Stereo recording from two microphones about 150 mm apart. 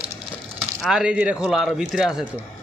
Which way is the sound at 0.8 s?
5° right (ahead or behind).